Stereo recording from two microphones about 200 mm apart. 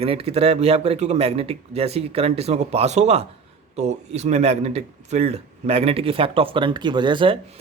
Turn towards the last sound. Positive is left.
turn(degrees=-25)  # may be behind; listen again after turning